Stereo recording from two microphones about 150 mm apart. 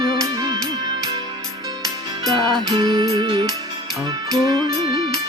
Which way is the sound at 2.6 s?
30° right (ahead or behind).